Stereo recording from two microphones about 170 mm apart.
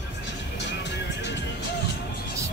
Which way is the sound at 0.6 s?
90° left.